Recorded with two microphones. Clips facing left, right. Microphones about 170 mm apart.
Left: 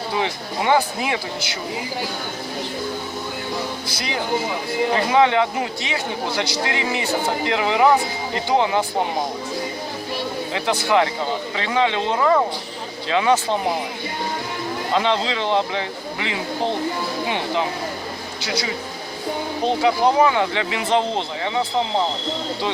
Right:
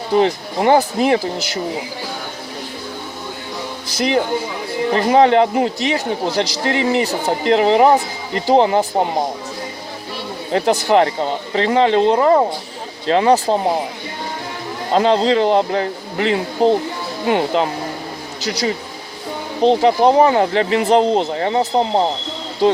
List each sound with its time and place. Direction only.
0.1 s a man's voice: 40° right (ahead or behind)
4.9 s a man's voice: 40° right (ahead or behind)
10.5 s a man's voice: 40° right (ahead or behind)
14.9 s a man's voice: 40° right (ahead or behind)
19.6 s a man's voice: 30° right (ahead or behind)